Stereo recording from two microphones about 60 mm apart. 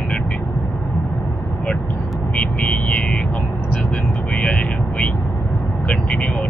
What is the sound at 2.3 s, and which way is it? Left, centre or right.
Vehicle, left.